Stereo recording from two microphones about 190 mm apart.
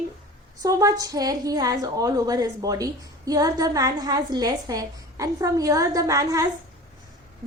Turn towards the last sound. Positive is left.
turn(degrees=-15)  # may be behind; listen again after turning